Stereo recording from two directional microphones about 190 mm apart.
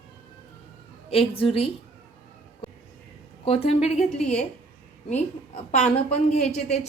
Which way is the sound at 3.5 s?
30° left (ahead or behind).